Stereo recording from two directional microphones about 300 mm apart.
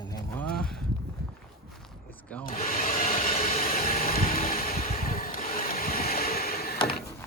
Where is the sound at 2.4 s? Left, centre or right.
Left.